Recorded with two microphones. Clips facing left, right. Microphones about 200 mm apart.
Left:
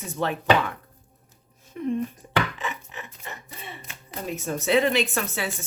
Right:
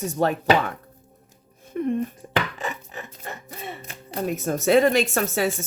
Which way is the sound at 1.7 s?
55° right (ahead or behind).